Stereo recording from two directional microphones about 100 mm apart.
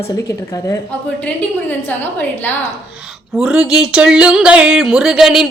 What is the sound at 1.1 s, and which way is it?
A woman's voice, 15° left (ahead or behind).